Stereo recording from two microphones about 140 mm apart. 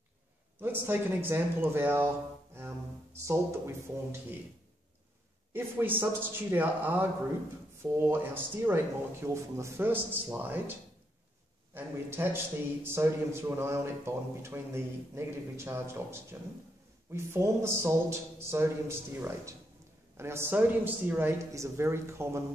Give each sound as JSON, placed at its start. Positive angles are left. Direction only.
{"t": 0.6, "sound": "speech", "side_deg": -15}
{"t": 3.2, "sound": "a man's voice", "side_deg": -20}
{"t": 5.5, "sound": "a man's voice", "side_deg": -15}